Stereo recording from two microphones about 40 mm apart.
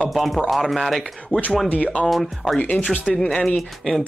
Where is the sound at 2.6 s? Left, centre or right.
Left.